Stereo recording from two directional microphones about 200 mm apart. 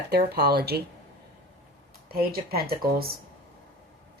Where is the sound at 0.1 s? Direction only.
50° right (ahead or behind).